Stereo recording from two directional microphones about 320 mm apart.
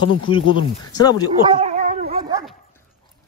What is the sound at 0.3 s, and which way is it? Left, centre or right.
Speech, centre.